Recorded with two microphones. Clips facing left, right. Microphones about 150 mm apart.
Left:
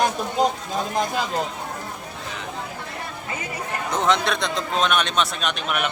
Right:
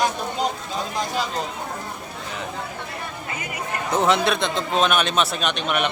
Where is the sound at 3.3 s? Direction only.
30° left (ahead or behind).